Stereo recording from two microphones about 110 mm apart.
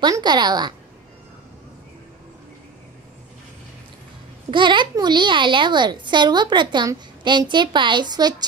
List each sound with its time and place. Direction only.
0.0 s a woman's voice: 40° right (ahead or behind)
4.5 s a child's voice: 45° right (ahead or behind)